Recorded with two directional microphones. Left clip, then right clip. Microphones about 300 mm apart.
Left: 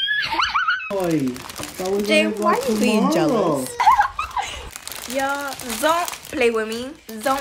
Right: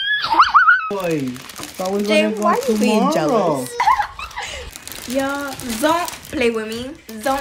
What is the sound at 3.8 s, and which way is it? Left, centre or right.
Dog, centre.